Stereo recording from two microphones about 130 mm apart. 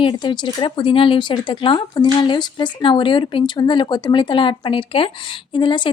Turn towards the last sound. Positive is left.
turn(degrees=40)  # may be behind; listen again after turning